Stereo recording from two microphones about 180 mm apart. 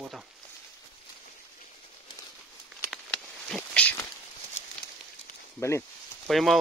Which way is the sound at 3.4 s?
5° left (ahead or behind).